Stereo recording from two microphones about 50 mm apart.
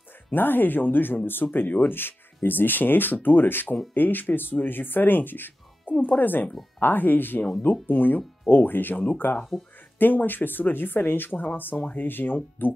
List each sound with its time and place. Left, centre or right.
0.3 s speech: left